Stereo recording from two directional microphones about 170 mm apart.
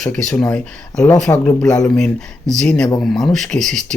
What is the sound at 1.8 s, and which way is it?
Speech, 5° left (ahead or behind).